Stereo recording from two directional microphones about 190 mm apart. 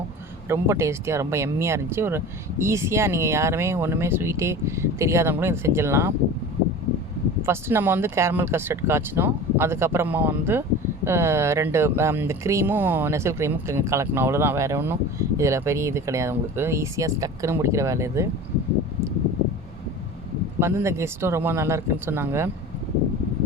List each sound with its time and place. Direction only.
0.4 s speech: 15° right (ahead or behind)
7.4 s speech: 15° right (ahead or behind)
20.6 s speech: 15° right (ahead or behind)